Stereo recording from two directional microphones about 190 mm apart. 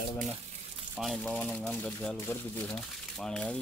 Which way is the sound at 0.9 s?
Centre (ahead or behind).